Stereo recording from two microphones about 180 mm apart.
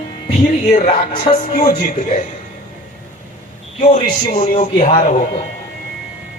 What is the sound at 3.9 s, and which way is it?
Music, 40° left (ahead or behind).